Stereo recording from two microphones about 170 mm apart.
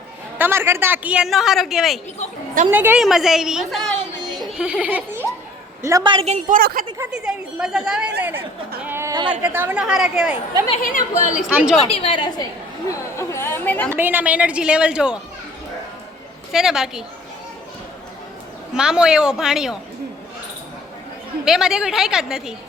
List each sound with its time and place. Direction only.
0.3 s a woman's voice: 15° right (ahead or behind)
5.8 s a woman's voice: 25° right (ahead or behind)
6.2 s a woman's voice: 45° right (ahead or behind)
7.0 s a woman's voice: 5° right (ahead or behind)
10.8 s a woman's voice: 55° left (ahead or behind)
11.4 s a woman's voice: 5° right (ahead or behind)
11.9 s a woman's voice: 35° left (ahead or behind)
12.9 s speech: 15° left (ahead or behind)
13.9 s a woman's voice: 10° right (ahead or behind)
16.5 s a woman's voice: 5° right (ahead or behind)
18.7 s a woman's voice: 5° right (ahead or behind)
21.4 s a woman's voice: 5° right (ahead or behind)